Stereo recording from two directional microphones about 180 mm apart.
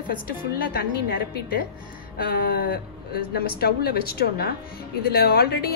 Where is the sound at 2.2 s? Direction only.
55° left (ahead or behind).